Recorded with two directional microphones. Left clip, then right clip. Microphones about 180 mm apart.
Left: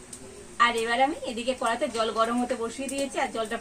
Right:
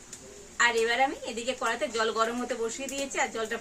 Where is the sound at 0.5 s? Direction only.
5° right (ahead or behind).